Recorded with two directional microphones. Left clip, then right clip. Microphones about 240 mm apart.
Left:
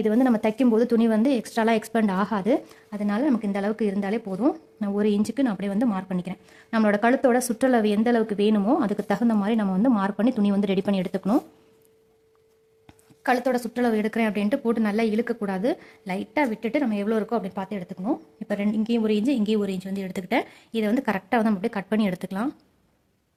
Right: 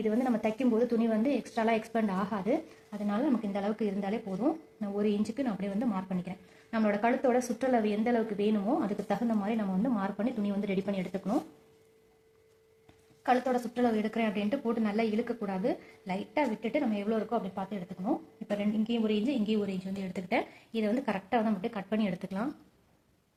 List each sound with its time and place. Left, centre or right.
0.0 s speech: left
13.2 s speech: left